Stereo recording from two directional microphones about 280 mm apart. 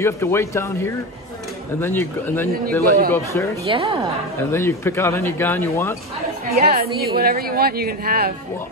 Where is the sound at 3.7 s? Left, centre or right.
Centre.